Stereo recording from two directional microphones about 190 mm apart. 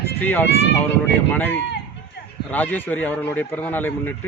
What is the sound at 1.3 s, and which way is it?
A man's voice, 10° left (ahead or behind).